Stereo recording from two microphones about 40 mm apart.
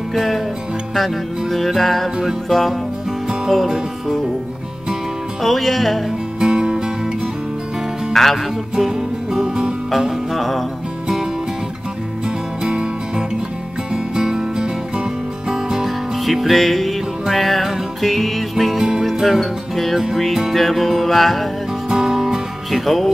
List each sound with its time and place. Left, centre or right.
0.1 s music: centre
3.4 s music: centre
5.4 s music: centre
6.4 s music: centre
8.1 s speech: centre
8.7 s music: centre
10.3 s music: centre
13.9 s music: centre
16.3 s music: centre
18.8 s music: centre
19.1 s music: centre
21.8 s music: centre